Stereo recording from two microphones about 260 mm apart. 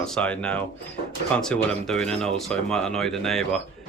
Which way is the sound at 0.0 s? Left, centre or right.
Centre.